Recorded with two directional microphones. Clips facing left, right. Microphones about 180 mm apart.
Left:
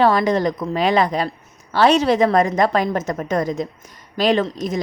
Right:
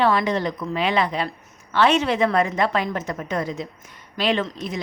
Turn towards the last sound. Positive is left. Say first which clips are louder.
# left 5 dB
turn(degrees=40)  # may be behind; listen again after turning